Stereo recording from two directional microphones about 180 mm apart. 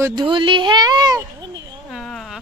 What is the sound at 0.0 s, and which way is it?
Speech, 25° right (ahead or behind).